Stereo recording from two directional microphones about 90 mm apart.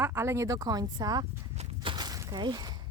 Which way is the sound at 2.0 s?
45° right (ahead or behind).